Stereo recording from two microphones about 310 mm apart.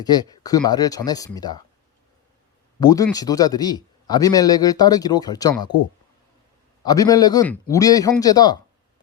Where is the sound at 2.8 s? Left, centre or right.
Centre.